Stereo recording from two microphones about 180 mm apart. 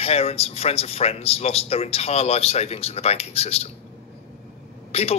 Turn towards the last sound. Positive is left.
turn(degrees=35)  # may be behind; listen again after turning